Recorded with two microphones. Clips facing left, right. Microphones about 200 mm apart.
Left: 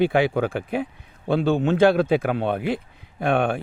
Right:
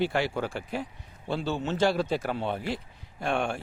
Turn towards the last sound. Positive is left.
turn(degrees=55)  # may be behind; listen again after turning